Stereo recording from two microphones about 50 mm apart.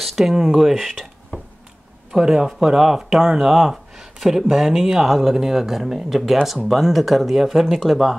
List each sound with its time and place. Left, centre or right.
0.0 s speech: centre
2.1 s speech: centre
5.0 s speech: centre